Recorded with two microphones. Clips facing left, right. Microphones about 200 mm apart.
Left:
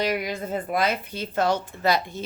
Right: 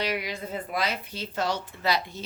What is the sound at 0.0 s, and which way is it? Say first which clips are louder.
A woman's voice: left 4 dB; 45° left (ahead or behind).